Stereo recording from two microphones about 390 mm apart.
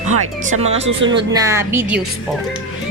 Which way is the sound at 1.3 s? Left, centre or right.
Centre.